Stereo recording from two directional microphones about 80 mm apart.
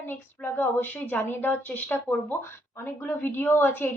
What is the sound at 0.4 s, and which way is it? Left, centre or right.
Speech, left.